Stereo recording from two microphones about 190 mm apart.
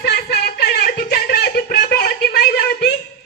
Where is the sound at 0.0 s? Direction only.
60° left (ahead or behind).